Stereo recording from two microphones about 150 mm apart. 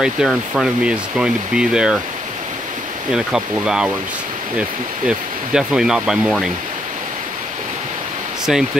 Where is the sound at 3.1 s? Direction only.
5° right (ahead or behind).